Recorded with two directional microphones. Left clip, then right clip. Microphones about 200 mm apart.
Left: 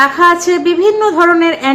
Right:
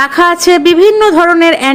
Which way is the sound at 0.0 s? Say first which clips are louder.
Even; 40° right (ahead or behind).